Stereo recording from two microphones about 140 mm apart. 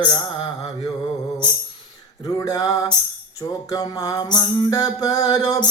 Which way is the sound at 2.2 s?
25° left (ahead or behind).